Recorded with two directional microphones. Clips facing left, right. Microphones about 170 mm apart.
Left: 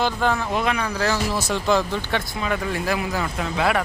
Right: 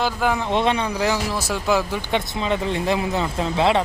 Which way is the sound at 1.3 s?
5° right (ahead or behind).